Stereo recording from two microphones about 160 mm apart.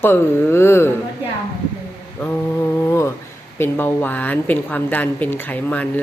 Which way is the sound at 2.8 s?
15° left (ahead or behind).